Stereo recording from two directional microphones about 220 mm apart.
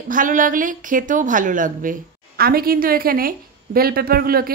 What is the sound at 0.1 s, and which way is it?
A woman's voice, 35° right (ahead or behind).